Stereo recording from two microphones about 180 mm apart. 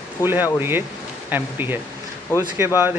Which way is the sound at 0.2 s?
10° right (ahead or behind).